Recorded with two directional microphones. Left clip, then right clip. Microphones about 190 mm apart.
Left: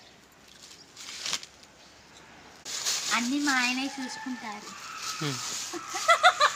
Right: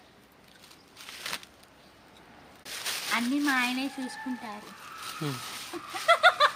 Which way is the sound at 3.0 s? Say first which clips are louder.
Right 1 dB; 20° right (ahead or behind).